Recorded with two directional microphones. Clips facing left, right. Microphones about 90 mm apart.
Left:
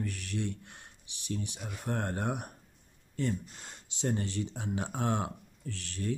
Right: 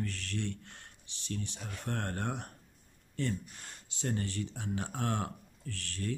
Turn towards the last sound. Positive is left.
turn(degrees=20)  # may be behind; listen again after turning